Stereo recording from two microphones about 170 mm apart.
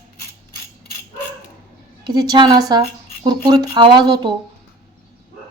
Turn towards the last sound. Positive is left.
turn(degrees=-25)  # may be behind; listen again after turning